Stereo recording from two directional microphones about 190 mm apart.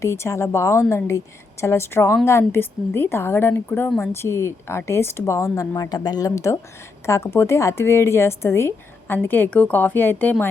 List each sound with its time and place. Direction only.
0.0 s a woman's voice: 15° left (ahead or behind)